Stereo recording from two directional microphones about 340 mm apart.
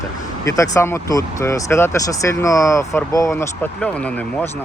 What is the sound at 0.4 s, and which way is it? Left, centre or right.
Speech, centre.